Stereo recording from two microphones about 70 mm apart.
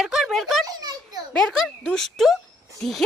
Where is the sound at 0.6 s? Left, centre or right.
Right.